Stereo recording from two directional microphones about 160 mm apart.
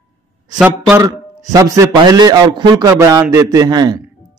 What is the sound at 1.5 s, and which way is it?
A man's voice, 20° right (ahead or behind).